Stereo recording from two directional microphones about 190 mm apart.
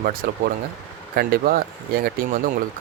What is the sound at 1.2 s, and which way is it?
Speech, 50° right (ahead or behind).